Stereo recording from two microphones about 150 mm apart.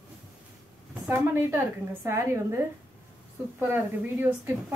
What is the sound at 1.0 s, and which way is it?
A woman's voice, 15° right (ahead or behind).